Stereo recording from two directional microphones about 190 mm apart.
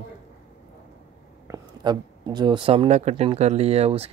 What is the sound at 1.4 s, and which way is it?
Speech, 20° right (ahead or behind).